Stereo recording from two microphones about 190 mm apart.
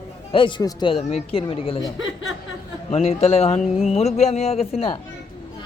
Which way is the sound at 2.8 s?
35° left (ahead or behind).